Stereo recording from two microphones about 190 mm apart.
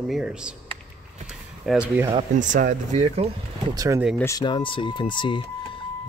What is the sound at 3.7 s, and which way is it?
Speech, 20° right (ahead or behind).